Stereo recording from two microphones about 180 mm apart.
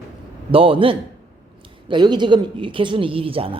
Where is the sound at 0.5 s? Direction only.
30° right (ahead or behind).